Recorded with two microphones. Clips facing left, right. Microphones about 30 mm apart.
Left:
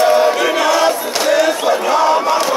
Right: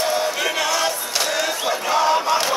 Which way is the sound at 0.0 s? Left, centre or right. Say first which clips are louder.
Left 10 dB; left.